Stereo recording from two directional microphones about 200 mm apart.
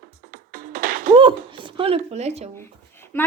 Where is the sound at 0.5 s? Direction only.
45° right (ahead or behind).